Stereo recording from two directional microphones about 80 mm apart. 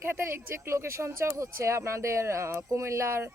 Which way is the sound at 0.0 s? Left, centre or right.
Right.